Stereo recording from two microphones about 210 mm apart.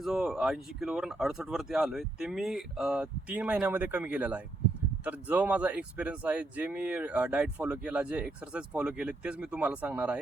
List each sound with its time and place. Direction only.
0.0 s speech: centre (ahead or behind)